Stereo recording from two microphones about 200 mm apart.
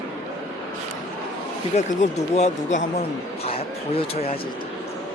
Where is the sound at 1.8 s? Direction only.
35° left (ahead or behind).